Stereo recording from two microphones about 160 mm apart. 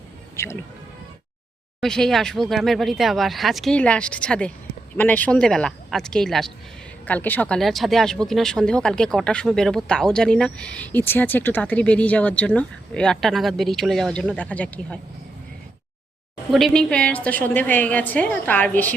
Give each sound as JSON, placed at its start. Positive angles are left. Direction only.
{"t": 0.3, "sound": "speech", "side_deg": 15}
{"t": 1.8, "sound": "speech", "side_deg": 5}
{"t": 16.5, "sound": "a woman's voice", "side_deg": 0}